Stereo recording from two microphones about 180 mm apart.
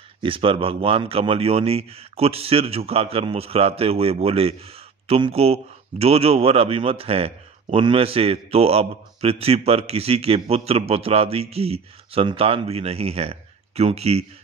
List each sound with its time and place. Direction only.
0.2 s a man's voice: 30° right (ahead or behind)